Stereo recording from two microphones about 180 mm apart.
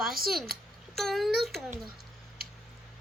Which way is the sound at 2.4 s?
55° right (ahead or behind).